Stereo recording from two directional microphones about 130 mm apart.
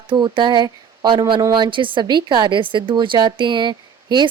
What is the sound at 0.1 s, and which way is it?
A woman's voice, 40° right (ahead or behind).